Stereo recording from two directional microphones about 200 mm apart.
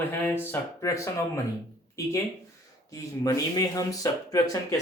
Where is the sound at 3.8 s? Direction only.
15° left (ahead or behind).